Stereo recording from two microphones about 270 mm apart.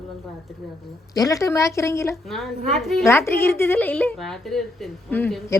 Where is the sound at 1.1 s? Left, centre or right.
Centre.